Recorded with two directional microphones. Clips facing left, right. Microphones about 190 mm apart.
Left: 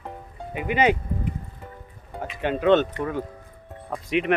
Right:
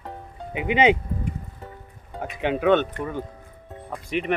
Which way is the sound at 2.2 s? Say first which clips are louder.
Right 1 dB; 15° right (ahead or behind).